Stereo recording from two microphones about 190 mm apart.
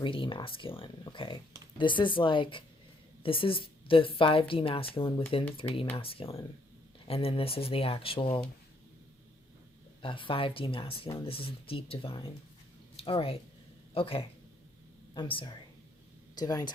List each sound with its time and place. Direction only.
0.0 s a woman's voice: 25° left (ahead or behind)
10.0 s a woman's voice: 25° left (ahead or behind)